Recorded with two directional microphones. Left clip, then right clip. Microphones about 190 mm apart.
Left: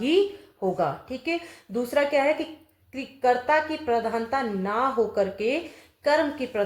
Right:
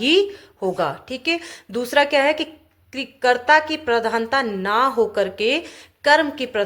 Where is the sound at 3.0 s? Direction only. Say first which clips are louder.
Right 4 dB; 25° right (ahead or behind).